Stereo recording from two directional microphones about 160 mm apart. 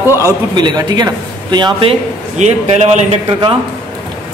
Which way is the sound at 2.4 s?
45° right (ahead or behind).